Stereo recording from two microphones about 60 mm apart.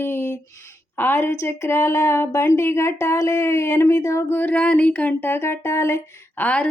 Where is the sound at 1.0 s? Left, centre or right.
Left.